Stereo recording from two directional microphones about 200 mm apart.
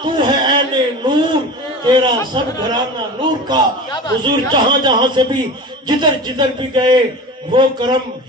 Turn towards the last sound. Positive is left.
turn(degrees=-20)  # may be behind; listen again after turning